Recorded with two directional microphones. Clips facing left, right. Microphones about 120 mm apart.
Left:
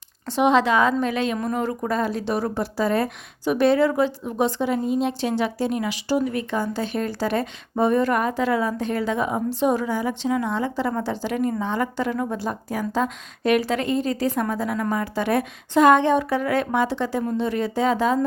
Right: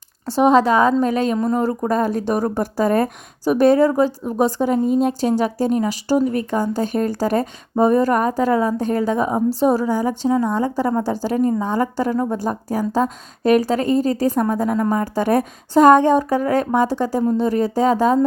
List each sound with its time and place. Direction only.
0.3 s speech: 40° right (ahead or behind)